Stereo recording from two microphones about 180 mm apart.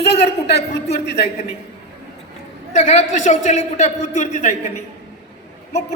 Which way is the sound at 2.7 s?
40° left (ahead or behind).